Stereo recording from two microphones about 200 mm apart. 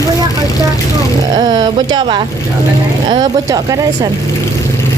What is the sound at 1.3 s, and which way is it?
Speech, 20° right (ahead or behind).